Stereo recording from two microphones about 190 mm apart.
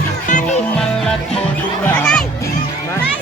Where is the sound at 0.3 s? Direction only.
40° left (ahead or behind).